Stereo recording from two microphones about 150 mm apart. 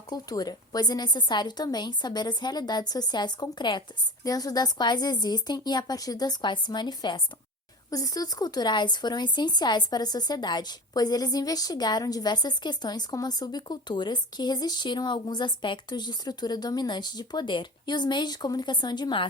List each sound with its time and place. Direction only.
0.1 s speech: 25° left (ahead or behind)